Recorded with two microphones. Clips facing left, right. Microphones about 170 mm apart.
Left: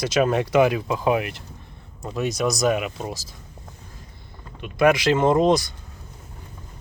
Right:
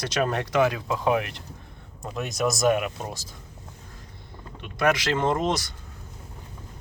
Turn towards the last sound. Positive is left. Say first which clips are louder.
# left 7 dB
turn(degrees=15)  # may be behind; listen again after turning